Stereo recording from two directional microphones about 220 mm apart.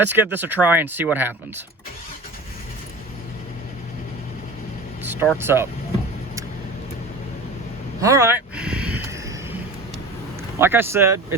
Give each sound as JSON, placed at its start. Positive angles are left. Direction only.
{"t": 0.0, "sound": "speech", "side_deg": -10}
{"t": 5.4, "sound": "speech", "side_deg": -10}
{"t": 8.0, "sound": "a sound", "side_deg": -10}
{"t": 10.6, "sound": "speech", "side_deg": -10}